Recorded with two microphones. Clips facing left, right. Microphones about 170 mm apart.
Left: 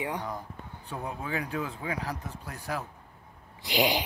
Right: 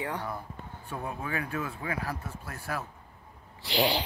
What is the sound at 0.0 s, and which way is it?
Speech, 15° left (ahead or behind).